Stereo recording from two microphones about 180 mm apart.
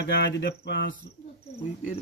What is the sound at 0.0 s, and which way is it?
Speech, 65° left (ahead or behind).